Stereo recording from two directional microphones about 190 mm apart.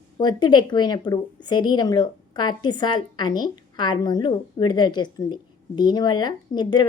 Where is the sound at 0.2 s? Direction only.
20° left (ahead or behind).